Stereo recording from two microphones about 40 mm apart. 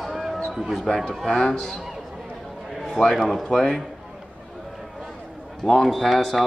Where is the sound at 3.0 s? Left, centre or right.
Centre.